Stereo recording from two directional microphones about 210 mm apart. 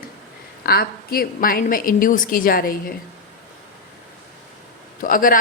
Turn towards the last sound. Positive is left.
turn(degrees=40)  # may be behind; listen again after turning